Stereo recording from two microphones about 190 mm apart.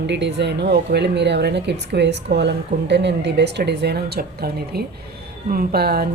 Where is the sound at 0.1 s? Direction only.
65° right (ahead or behind).